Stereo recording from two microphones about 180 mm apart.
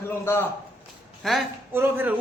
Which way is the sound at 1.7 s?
10° right (ahead or behind).